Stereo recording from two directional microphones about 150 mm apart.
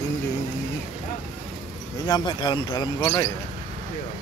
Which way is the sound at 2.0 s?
30° left (ahead or behind).